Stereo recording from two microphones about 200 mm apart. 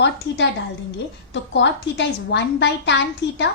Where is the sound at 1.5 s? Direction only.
60° left (ahead or behind).